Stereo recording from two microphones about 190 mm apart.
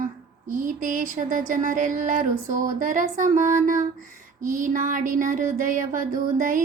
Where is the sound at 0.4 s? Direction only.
45° right (ahead or behind).